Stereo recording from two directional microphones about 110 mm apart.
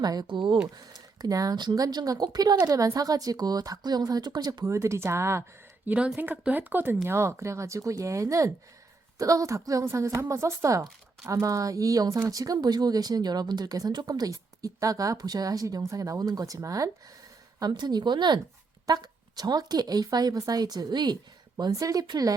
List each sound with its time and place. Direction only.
0.0 s speech: 40° right (ahead or behind)
0.8 s speech: 35° right (ahead or behind)
17.6 s speech: 40° right (ahead or behind)